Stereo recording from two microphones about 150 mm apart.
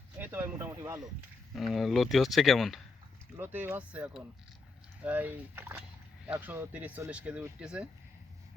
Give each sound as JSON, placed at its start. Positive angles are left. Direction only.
{"t": 0.2, "sound": "speech", "side_deg": -15}
{"t": 1.5, "sound": "speech", "side_deg": 0}
{"t": 3.3, "sound": "speech", "side_deg": -10}